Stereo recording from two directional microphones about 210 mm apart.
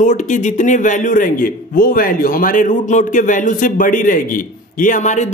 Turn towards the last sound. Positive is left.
turn(degrees=35)  # may be behind; listen again after turning